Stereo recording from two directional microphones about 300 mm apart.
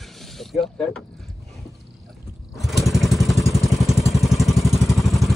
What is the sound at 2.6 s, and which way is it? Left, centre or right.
Vehicle, centre.